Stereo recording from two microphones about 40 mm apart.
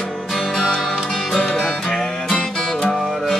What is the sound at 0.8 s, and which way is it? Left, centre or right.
Music, centre.